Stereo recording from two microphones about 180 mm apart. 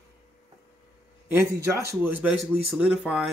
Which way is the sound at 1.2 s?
15° right (ahead or behind).